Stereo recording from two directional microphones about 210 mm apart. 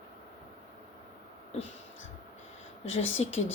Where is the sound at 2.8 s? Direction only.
65° left (ahead or behind).